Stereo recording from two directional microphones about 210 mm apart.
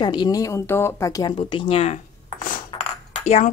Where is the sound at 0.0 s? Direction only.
20° left (ahead or behind).